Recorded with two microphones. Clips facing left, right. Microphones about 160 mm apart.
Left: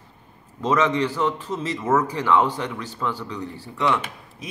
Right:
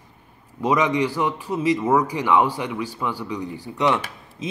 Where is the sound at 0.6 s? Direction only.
15° right (ahead or behind).